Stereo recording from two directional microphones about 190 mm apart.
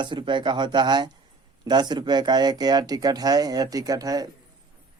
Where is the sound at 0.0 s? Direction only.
25° right (ahead or behind).